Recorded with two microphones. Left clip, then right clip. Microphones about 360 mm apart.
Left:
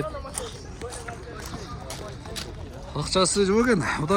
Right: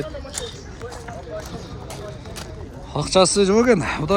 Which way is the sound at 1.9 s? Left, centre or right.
Centre.